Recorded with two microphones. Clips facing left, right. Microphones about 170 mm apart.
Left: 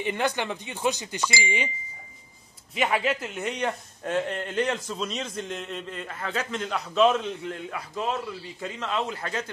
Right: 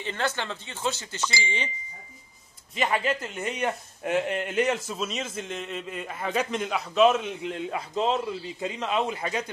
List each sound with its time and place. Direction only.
0.0 s speech: 15° left (ahead or behind)
2.7 s a man's voice: 5° left (ahead or behind)
7.5 s a man's voice: 25° right (ahead or behind)